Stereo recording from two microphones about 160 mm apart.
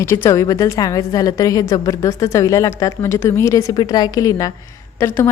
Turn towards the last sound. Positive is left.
turn(degrees=15)  # may be behind; listen again after turning